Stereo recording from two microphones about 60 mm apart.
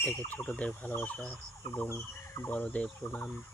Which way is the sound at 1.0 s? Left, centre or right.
Centre.